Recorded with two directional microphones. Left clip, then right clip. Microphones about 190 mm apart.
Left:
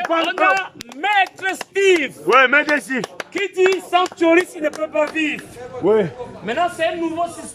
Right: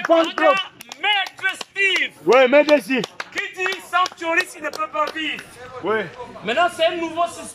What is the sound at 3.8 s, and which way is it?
Speech, 50° left (ahead or behind).